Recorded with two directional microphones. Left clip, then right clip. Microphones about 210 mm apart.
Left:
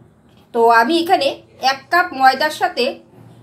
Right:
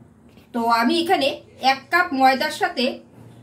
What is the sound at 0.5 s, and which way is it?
A woman's voice, 25° left (ahead or behind).